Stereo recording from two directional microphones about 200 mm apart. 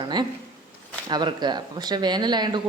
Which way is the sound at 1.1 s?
20° right (ahead or behind).